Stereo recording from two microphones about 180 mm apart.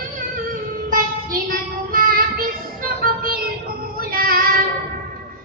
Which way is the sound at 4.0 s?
55° right (ahead or behind).